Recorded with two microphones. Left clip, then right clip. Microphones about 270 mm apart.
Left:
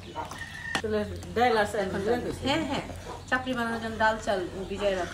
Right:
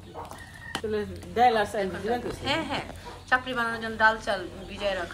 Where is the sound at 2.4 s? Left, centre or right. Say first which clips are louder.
Even; centre.